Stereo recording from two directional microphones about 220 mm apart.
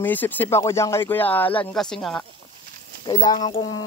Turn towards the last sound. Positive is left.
turn(degrees=20)  # may be behind; listen again after turning